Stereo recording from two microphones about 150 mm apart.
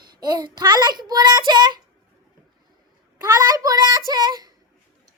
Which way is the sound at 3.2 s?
25° right (ahead or behind).